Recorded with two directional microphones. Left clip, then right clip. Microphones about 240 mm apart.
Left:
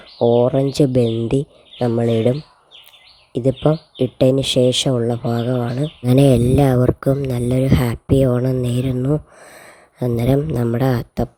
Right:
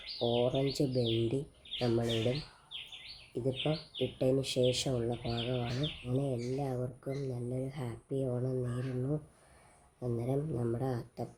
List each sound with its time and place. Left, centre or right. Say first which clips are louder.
0.2 s speech: left 17 dB; left
3.3 s speech: left 17 dB; left